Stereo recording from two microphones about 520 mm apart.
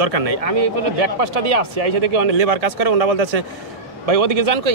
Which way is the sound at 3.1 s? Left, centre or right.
Right.